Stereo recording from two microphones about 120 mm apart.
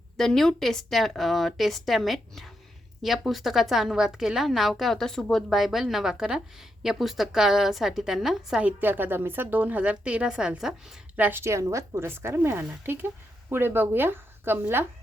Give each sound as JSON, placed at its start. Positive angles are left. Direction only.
{"t": 0.2, "sound": "a woman's voice", "side_deg": 5}
{"t": 8.8, "sound": "a woman's voice", "side_deg": -15}
{"t": 11.2, "sound": "a woman's voice", "side_deg": -15}